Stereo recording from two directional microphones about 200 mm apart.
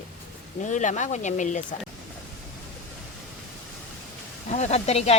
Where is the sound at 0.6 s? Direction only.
40° left (ahead or behind).